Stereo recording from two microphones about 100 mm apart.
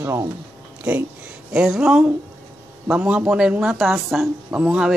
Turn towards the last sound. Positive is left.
turn(degrees=-10)  # may be behind; listen again after turning